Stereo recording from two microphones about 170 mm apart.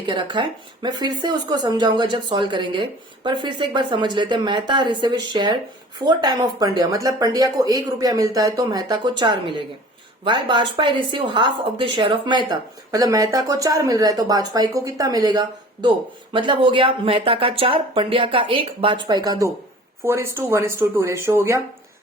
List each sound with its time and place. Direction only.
0.0 s speech: 30° right (ahead or behind)